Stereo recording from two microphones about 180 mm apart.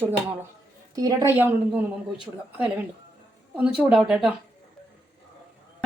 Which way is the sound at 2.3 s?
5° right (ahead or behind).